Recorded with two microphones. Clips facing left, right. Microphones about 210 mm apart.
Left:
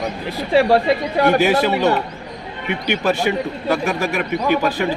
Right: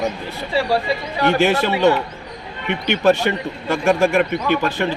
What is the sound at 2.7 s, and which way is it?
Speech, 10° left (ahead or behind).